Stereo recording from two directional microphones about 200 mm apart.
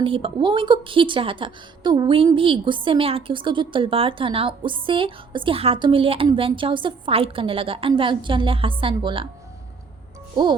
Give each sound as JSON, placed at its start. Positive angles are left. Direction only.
{"t": 0.0, "sound": "a woman's voice", "side_deg": -25}